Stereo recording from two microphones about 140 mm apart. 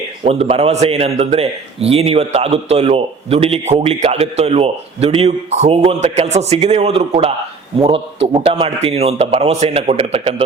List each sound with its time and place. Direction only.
0.3 s a man's voice: 45° right (ahead or behind)